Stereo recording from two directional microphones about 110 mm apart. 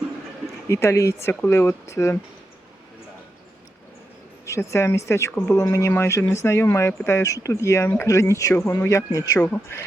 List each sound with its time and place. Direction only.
0.7 s speech: 25° left (ahead or behind)
4.4 s speech: 25° left (ahead or behind)